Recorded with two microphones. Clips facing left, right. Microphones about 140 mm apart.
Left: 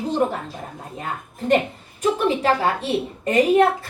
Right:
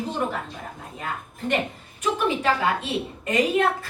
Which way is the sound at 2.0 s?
35° left (ahead or behind).